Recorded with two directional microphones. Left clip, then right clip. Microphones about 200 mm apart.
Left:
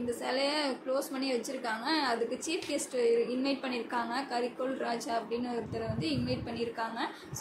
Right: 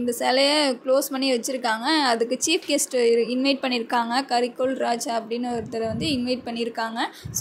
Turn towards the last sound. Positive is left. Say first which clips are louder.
# right 8 dB
turn(degrees=-40)  # may be behind; listen again after turning